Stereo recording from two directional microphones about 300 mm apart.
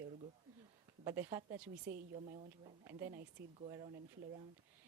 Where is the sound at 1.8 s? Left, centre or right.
Right.